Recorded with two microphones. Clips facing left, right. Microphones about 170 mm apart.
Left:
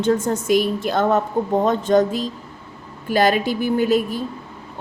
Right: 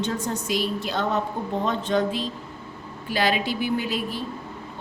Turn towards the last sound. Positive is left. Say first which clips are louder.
# left 8 dB
turn(degrees=45)  # may be behind; listen again after turning